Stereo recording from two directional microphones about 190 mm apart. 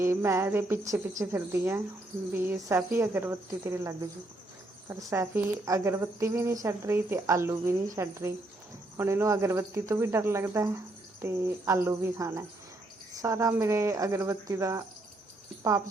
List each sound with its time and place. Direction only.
0.0 s speech: 15° right (ahead or behind)